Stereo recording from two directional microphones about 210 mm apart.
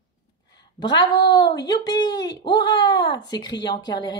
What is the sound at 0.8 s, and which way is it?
Speech, 20° left (ahead or behind).